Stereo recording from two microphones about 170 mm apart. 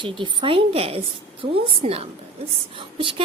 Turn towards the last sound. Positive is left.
turn(degrees=-30)  # may be behind; listen again after turning